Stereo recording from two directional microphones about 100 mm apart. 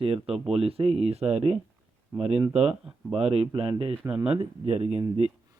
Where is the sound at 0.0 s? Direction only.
70° right (ahead or behind).